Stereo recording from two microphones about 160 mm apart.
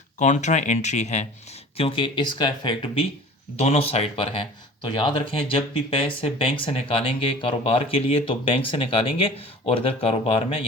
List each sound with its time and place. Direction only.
0.2 s speech: 45° left (ahead or behind)
1.7 s speech: 35° left (ahead or behind)